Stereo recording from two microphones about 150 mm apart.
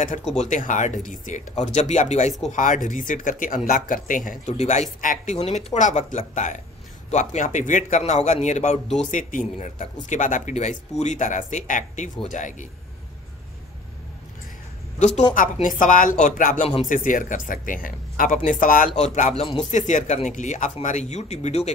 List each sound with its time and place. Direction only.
0.0 s speech: 50° left (ahead or behind)
15.3 s speech: 60° left (ahead or behind)
18.9 s speech: 50° left (ahead or behind)